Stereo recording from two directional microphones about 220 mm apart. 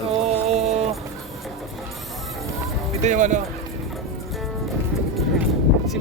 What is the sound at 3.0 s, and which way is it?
Speech, 35° right (ahead or behind).